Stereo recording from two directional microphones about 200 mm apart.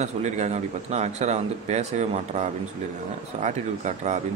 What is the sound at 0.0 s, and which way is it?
A man's voice, 35° right (ahead or behind).